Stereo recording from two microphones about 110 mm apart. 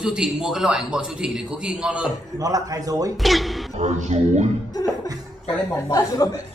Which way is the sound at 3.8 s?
90° right.